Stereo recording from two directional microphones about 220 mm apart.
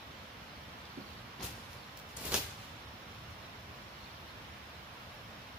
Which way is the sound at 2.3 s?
5° right (ahead or behind).